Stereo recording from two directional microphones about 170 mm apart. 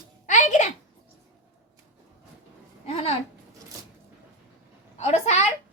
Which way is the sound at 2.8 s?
35° left (ahead or behind).